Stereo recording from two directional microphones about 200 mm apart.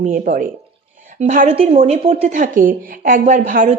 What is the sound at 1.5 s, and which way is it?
Speech, 30° right (ahead or behind).